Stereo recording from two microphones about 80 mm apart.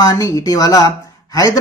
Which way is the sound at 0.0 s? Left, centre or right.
Left.